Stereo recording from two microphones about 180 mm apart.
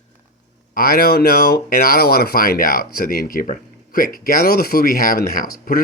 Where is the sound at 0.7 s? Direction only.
55° left (ahead or behind).